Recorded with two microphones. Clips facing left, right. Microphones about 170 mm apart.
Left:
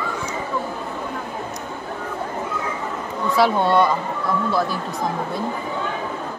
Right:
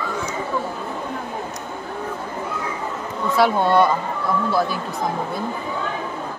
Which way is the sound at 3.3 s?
Centre (ahead or behind).